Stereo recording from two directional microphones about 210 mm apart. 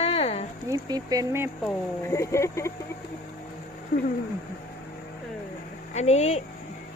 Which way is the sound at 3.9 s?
45° left (ahead or behind).